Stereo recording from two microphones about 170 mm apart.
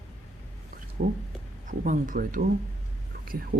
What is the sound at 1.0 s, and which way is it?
Speech, 45° right (ahead or behind).